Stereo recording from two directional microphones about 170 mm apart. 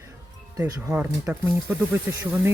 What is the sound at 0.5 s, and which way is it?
Speech, 20° right (ahead or behind).